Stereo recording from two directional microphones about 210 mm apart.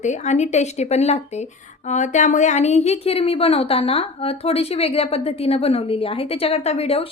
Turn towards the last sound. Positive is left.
turn(degrees=30)  # may be behind; listen again after turning